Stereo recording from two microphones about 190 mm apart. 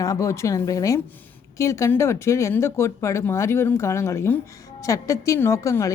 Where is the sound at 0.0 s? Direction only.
15° left (ahead or behind).